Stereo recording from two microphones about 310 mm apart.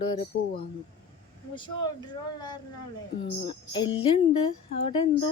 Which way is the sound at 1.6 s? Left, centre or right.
Centre.